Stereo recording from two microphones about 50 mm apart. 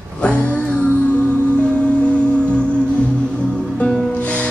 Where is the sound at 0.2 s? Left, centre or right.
Left.